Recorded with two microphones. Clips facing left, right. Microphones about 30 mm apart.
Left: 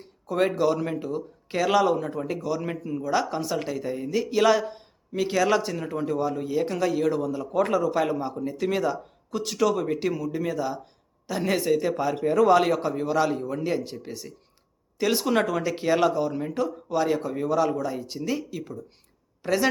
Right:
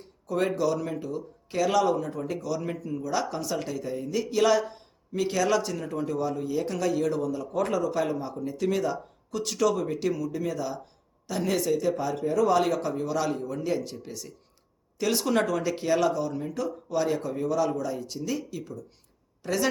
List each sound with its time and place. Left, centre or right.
0.0 s a man's voice: left
12.3 s a man's voice: left
12.5 s a man's voice: left; by 15.7 s centre
15.7 s speech: left
16.9 s a man's voice: centre